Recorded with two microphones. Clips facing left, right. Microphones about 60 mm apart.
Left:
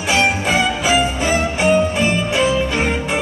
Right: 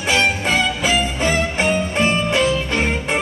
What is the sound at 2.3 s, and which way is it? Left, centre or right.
Music, centre.